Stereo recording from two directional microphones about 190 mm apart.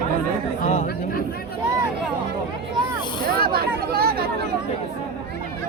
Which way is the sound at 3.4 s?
55° right (ahead or behind).